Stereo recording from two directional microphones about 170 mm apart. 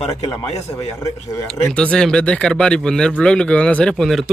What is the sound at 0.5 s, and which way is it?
Speech, 20° left (ahead or behind).